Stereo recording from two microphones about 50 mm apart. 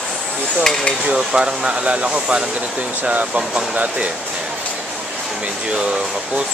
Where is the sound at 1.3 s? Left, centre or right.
Centre.